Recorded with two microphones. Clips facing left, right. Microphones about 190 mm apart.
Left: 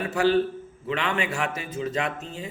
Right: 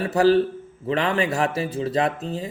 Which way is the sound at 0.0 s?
35° right (ahead or behind).